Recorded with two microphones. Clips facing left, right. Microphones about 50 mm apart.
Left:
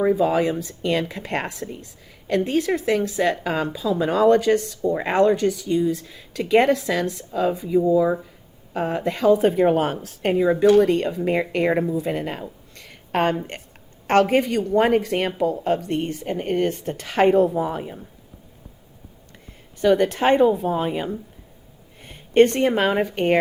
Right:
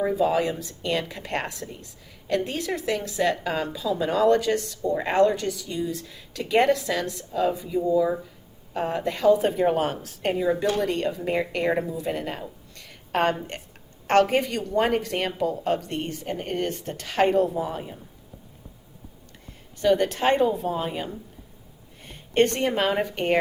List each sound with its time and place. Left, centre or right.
0.0 s a woman's voice: left
12.0 s a sound: left
14.1 s a woman's voice: left
19.8 s a woman's voice: centre
22.4 s a woman's voice: centre